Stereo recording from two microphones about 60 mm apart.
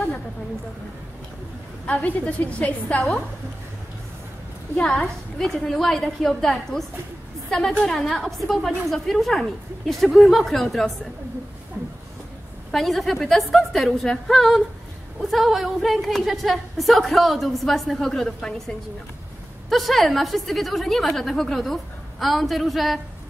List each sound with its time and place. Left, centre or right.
2.0 s a woman's voice: left
4.7 s a woman's voice: centre
7.8 s a woman's voice: centre
12.7 s a woman's voice: centre